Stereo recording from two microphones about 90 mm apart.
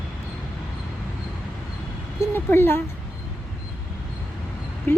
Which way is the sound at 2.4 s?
25° left (ahead or behind).